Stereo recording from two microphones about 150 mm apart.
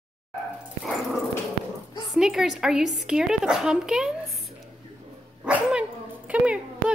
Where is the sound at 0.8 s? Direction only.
Centre (ahead or behind).